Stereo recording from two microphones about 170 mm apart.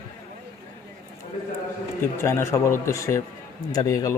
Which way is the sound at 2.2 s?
15° left (ahead or behind).